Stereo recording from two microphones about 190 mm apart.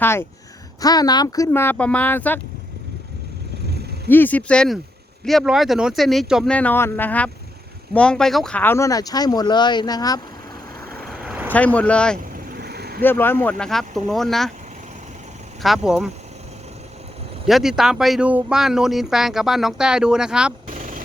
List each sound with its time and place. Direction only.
0.0 s speech: 10° left (ahead or behind)
3.7 s vehicle: 60° right (ahead or behind)
4.1 s speech: 10° left (ahead or behind)
11.0 s vehicle: centre (ahead or behind)
11.5 s speech: 5° left (ahead or behind)
12.5 s vehicle: 55° right (ahead or behind)
13.0 s speech: 10° left (ahead or behind)
15.6 s speech: centre (ahead or behind)
17.4 s speech: centre (ahead or behind)
20.7 s a sound: 45° right (ahead or behind)